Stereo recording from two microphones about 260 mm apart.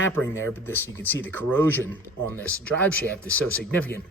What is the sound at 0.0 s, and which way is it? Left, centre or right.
A man's voice, centre.